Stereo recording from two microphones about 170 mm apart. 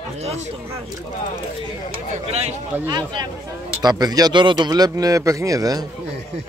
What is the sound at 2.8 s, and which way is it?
Speech, 25° right (ahead or behind).